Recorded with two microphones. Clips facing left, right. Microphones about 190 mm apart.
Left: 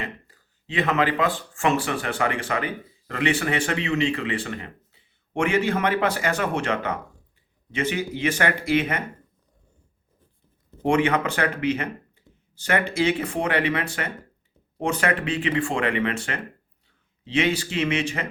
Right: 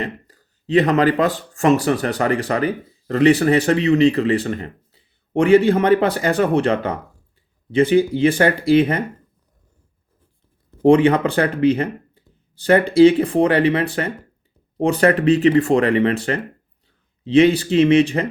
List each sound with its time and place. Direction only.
0.0 s speech: 40° right (ahead or behind)
10.8 s speech: 35° right (ahead or behind)